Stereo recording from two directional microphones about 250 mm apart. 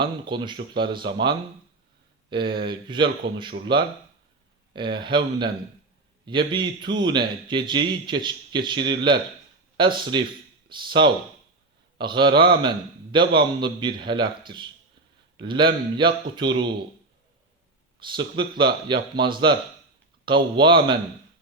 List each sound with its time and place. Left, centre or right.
0.0 s a man's voice: centre
18.3 s a man's voice: centre